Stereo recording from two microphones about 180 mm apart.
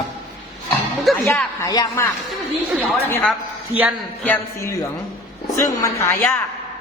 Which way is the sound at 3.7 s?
35° right (ahead or behind).